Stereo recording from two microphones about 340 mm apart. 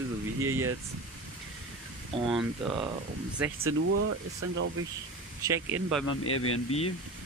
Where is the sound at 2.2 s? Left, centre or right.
Centre.